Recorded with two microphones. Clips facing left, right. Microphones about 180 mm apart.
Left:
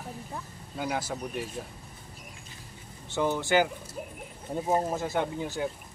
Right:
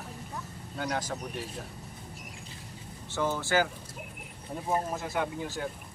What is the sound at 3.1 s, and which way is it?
Speech, 15° left (ahead or behind).